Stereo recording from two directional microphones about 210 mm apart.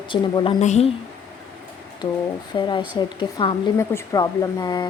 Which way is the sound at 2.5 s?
20° left (ahead or behind).